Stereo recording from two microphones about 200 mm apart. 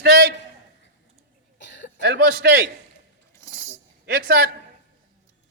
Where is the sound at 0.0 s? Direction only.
50° right (ahead or behind).